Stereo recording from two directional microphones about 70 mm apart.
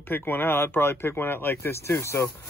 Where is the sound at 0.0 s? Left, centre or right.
Left.